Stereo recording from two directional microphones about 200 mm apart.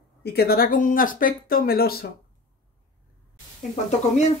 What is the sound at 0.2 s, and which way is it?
Speech, 50° left (ahead or behind).